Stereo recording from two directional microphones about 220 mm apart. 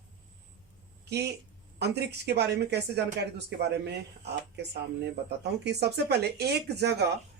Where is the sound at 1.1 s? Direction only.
50° right (ahead or behind).